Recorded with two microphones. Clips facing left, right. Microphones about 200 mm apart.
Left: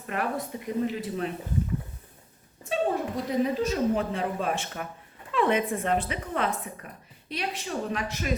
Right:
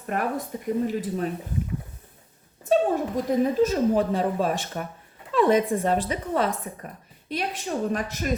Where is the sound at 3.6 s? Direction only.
40° right (ahead or behind).